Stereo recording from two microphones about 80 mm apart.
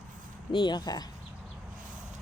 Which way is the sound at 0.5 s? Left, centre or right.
Left.